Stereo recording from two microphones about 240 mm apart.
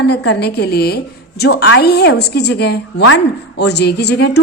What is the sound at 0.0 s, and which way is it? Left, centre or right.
A woman's voice, left.